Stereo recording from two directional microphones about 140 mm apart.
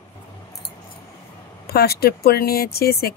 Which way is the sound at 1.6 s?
90° left.